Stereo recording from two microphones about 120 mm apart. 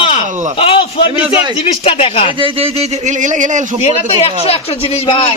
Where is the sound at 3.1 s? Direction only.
90° right.